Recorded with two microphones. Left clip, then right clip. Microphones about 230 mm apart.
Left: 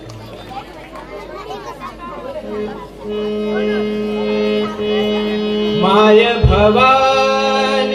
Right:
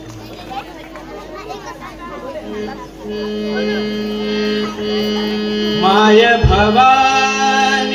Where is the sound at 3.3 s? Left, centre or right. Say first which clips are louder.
Left 1 dB; right.